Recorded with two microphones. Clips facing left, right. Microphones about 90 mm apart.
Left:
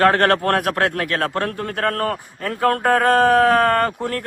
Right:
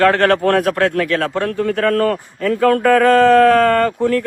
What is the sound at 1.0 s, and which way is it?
A man's voice, 50° left (ahead or behind).